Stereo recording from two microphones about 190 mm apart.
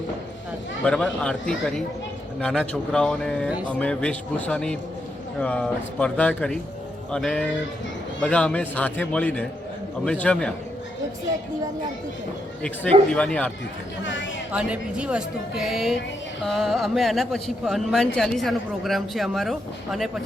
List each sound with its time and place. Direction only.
0.9 s a man's voice: 5° left (ahead or behind)
13.1 s a man's voice: 5° left (ahead or behind)
14.0 s speech: 75° left (ahead or behind)
14.5 s speech: 5° right (ahead or behind)